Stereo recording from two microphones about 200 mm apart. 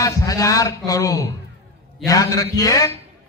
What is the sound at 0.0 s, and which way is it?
A man's voice, 15° left (ahead or behind).